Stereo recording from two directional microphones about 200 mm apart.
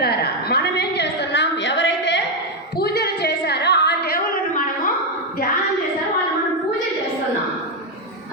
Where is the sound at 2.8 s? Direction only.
50° left (ahead or behind).